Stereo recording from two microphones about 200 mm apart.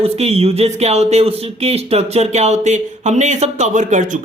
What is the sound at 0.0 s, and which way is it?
Speech, 30° right (ahead or behind).